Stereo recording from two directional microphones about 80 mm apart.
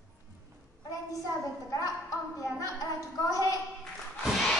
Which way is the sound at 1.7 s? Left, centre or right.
Left.